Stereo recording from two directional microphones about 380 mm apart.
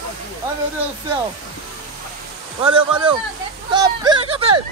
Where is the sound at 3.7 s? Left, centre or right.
Centre.